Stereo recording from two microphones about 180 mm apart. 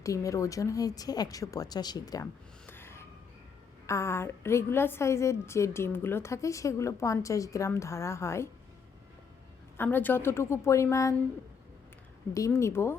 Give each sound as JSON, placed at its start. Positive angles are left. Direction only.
{"t": 0.0, "sound": "a woman's voice", "side_deg": 20}
{"t": 2.6, "sound": "gasp", "side_deg": 10}
{"t": 3.8, "sound": "a woman's voice", "side_deg": 15}
{"t": 9.7, "sound": "a woman's voice", "side_deg": 10}
{"t": 12.3, "sound": "a woman's voice", "side_deg": 15}